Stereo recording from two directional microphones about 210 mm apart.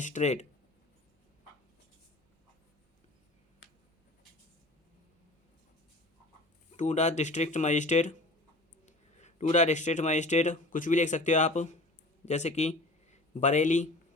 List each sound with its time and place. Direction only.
0.0 s speech: 35° left (ahead or behind)
6.7 s speech: 35° left (ahead or behind)